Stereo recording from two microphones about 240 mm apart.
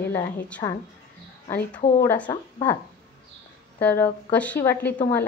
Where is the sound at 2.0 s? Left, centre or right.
Centre.